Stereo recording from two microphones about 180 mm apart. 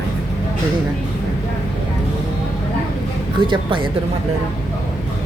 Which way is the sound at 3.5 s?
25° right (ahead or behind).